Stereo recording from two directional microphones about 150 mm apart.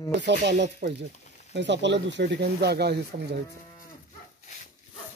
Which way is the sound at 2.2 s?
90° right.